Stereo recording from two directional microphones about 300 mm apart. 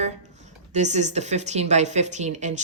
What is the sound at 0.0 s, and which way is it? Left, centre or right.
Speech, right.